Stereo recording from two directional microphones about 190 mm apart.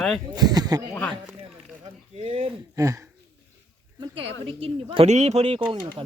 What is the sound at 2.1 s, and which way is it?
Speech, 30° right (ahead or behind).